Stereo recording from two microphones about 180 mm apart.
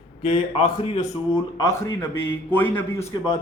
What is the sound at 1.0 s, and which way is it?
Speech, 20° left (ahead or behind).